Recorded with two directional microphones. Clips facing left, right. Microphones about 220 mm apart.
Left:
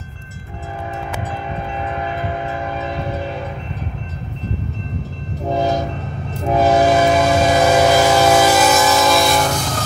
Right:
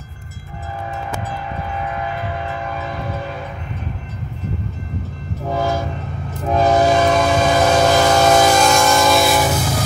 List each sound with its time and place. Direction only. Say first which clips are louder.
5.4 s train: left 2 dB; 20° left (ahead or behind)
6.4 s train: left 1 dB; 10° left (ahead or behind)